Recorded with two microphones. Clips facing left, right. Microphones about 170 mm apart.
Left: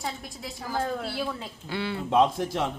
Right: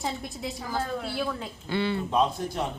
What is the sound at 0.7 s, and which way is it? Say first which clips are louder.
Speech: left 2 dB; 5° left (ahead or behind).